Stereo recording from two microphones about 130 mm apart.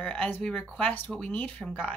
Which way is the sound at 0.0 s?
10° left (ahead or behind).